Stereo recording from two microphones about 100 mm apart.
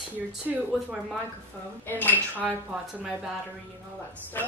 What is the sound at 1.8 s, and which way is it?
Speech, 20° left (ahead or behind).